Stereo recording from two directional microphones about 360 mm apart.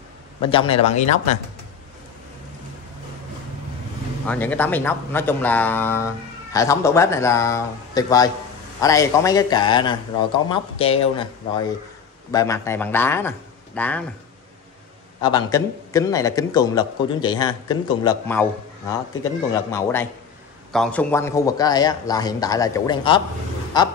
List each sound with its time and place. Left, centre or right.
0.4 s speech: centre
4.3 s speech: centre
15.2 s speech: centre